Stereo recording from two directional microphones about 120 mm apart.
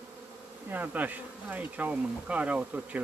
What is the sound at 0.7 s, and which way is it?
Speech, 15° right (ahead or behind).